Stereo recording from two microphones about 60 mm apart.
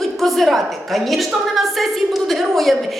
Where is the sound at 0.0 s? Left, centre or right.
Centre.